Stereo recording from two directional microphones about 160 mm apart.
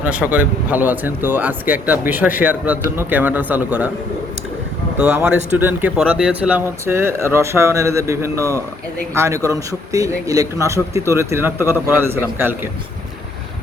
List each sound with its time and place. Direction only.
0.0 s speech: 10° right (ahead or behind)
4.9 s speech: 5° right (ahead or behind)